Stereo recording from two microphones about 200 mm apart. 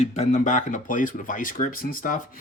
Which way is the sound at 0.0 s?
35° left (ahead or behind).